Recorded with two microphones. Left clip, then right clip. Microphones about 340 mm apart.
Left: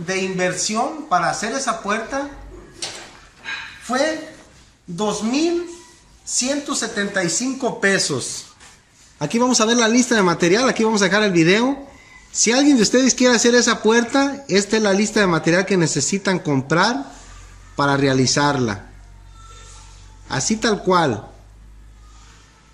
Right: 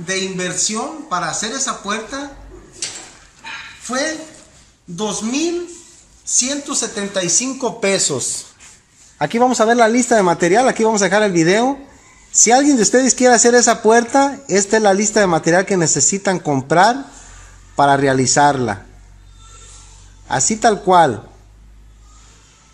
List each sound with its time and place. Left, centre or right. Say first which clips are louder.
0.0 s speech: even; centre
3.8 s a woman's voice: left 1 dB; centre
9.2 s speech: right 4 dB; right
20.3 s speech: right 5 dB; centre